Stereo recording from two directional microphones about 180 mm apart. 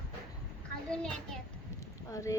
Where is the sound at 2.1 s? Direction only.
15° left (ahead or behind).